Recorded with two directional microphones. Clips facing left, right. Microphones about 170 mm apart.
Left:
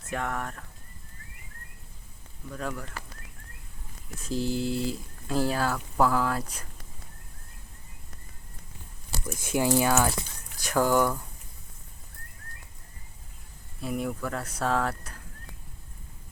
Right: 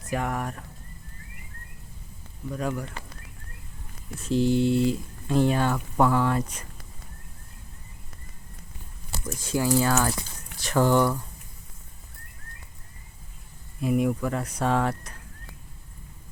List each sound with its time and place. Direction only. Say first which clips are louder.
0.1 s speech: right 3 dB; 5° right (ahead or behind)
2.5 s speech: right 5 dB; 10° right (ahead or behind)
4.4 s speech: right 8 dB; centre (ahead or behind)
9.2 s speech: even; 20° left (ahead or behind)
13.8 s speech: right 7 dB; 5° right (ahead or behind)